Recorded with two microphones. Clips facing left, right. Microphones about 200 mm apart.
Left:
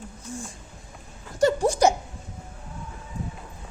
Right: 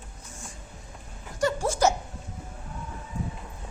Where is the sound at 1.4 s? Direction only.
15° left (ahead or behind).